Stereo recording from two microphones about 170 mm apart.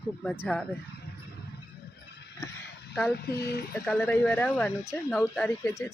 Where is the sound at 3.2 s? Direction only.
65° left (ahead or behind).